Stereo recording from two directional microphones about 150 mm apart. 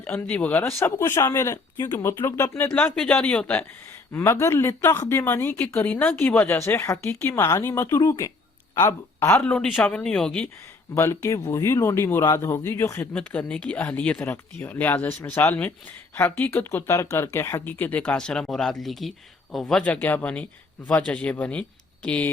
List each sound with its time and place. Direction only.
0.0 s speech: 10° left (ahead or behind)
9.4 s speech: 5° left (ahead or behind)
10.9 s speech: 20° left (ahead or behind)